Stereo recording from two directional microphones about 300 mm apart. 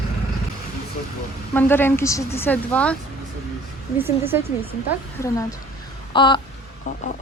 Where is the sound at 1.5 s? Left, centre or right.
Centre.